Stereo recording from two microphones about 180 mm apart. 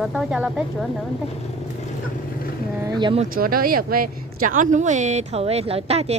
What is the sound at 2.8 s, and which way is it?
Speech, 20° right (ahead or behind).